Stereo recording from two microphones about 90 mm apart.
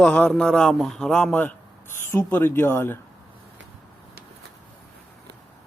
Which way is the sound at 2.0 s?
25° left (ahead or behind).